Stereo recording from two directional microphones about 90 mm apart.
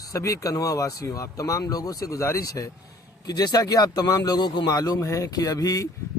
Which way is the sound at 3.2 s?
50° left (ahead or behind).